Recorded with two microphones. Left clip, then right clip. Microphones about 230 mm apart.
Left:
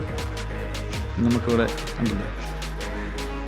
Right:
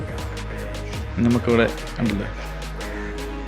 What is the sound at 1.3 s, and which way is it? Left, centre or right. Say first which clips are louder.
Speech: right 4 dB; centre.